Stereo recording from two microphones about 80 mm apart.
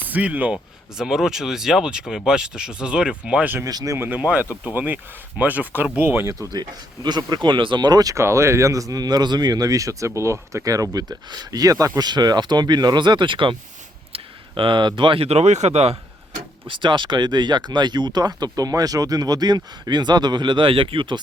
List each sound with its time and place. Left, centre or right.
0.0 s speech: centre
3.7 s speech: right
3.9 s speech: right
4.2 s speech: centre
6.5 s speech: right
8.1 s speech: right
10.9 s speech: right
16.6 s speech: right